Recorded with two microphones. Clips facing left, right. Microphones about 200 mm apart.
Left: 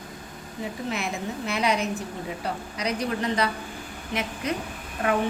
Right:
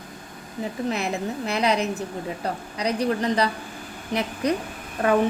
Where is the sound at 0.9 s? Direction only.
35° right (ahead or behind).